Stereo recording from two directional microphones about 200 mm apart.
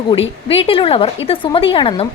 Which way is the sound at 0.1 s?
25° left (ahead or behind).